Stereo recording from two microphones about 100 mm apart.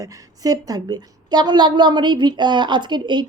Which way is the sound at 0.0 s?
40° right (ahead or behind).